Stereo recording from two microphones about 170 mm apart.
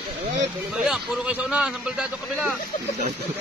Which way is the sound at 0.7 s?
5° right (ahead or behind).